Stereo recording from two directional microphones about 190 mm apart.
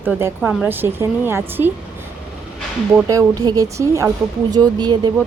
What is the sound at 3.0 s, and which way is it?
Speech, 20° right (ahead or behind).